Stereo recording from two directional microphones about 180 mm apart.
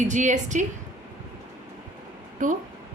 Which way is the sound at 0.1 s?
40° right (ahead or behind).